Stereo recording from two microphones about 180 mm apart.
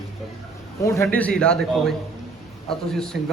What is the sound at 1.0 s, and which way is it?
A man's voice, 5° left (ahead or behind).